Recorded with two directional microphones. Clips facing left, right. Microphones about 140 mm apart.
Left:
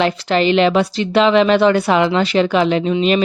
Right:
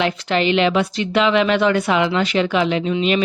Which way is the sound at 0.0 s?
35° left (ahead or behind).